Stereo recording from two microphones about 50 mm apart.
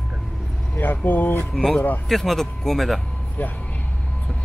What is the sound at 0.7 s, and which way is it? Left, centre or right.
Speech, left.